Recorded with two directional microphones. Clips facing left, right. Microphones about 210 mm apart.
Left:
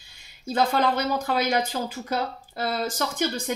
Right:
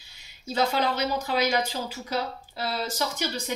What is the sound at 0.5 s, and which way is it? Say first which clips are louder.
Speech: left 3 dB; 50° left (ahead or behind).